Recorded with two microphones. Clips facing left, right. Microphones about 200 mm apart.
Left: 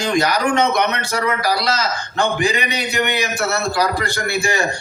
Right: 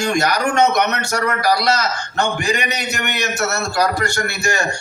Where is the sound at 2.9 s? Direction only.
45° right (ahead or behind).